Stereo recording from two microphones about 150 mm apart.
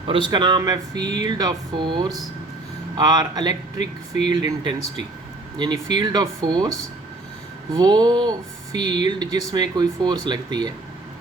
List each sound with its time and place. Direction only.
0.1 s speech: 30° right (ahead or behind)
7.7 s speech: 25° right (ahead or behind)